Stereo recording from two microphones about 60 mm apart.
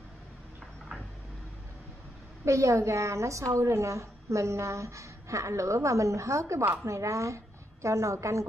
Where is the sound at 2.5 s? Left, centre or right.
Right.